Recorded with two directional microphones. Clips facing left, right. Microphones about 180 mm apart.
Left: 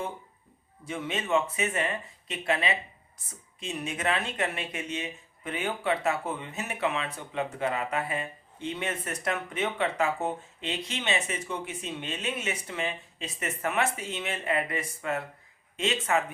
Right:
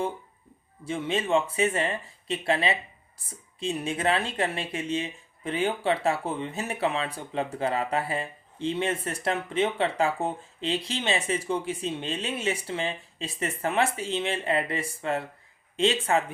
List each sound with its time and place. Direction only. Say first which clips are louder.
0.9 s speech: right 3 dB; 30° right (ahead or behind)